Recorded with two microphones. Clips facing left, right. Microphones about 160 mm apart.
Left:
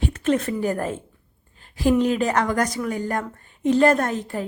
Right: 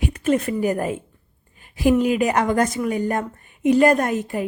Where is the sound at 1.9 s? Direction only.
10° right (ahead or behind).